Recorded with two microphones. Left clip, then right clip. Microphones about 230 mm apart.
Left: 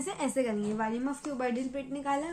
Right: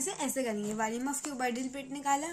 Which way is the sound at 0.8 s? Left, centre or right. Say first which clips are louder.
Left 1 dB; right.